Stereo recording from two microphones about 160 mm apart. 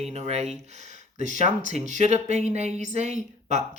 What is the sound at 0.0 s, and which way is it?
Speech, 40° right (ahead or behind).